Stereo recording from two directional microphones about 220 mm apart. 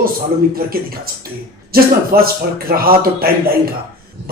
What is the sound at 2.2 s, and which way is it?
Speech, 40° right (ahead or behind).